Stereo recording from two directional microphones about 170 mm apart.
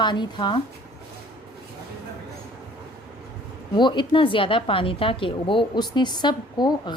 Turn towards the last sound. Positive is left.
turn(degrees=25)  # may be behind; listen again after turning